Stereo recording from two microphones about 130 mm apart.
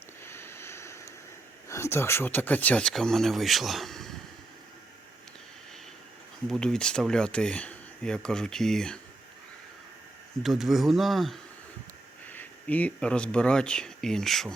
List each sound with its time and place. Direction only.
0.3 s sniff: 20° left (ahead or behind)
1.7 s speech: 20° left (ahead or behind); by 4.1 s centre (ahead or behind)
6.5 s speech: 5° left (ahead or behind)
10.4 s speech: centre (ahead or behind)
12.3 s speech: 10° left (ahead or behind)